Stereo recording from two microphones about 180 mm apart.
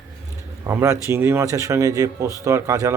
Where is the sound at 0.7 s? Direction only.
15° right (ahead or behind).